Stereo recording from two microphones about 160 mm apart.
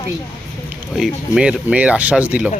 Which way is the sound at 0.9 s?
5° right (ahead or behind).